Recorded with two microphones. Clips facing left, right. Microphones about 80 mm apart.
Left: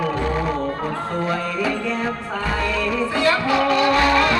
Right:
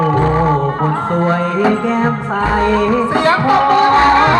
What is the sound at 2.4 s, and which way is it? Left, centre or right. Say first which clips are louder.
Music: right 10 dB; right.